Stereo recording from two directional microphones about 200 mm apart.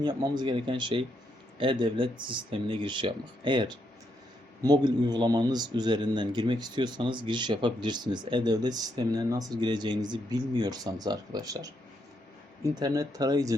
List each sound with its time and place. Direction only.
0.0 s speech: 20° right (ahead or behind)
12.7 s speech: 15° right (ahead or behind)